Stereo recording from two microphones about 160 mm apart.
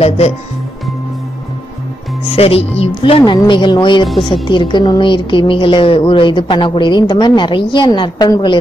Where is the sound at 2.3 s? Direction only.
40° left (ahead or behind).